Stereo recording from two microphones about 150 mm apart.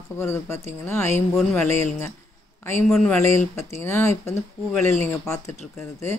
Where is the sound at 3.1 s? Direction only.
20° left (ahead or behind).